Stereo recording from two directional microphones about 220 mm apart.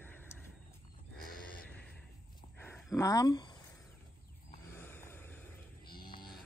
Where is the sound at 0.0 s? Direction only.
10° left (ahead or behind).